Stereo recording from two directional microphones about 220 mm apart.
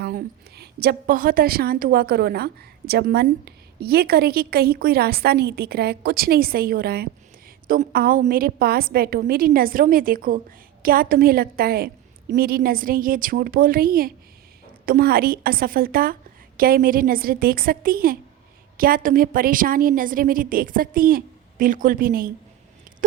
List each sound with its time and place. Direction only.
0.0 s a woman's voice: 45° right (ahead or behind)